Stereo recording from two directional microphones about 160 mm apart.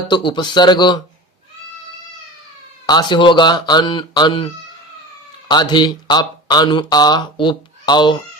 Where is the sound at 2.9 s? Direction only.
25° left (ahead or behind).